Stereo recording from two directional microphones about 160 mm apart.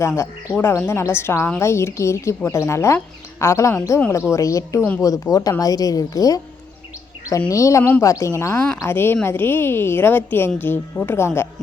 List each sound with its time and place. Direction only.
0.2 s a woman's voice: 15° left (ahead or behind)
7.5 s a woman's voice: 20° left (ahead or behind)